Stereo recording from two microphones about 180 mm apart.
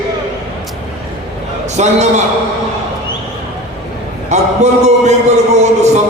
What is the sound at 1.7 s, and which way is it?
Speech, 40° right (ahead or behind).